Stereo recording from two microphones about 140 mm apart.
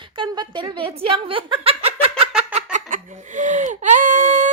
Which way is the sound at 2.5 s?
60° right (ahead or behind).